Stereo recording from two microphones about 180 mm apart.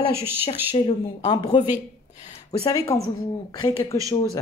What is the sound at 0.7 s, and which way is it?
Speech, 35° left (ahead or behind).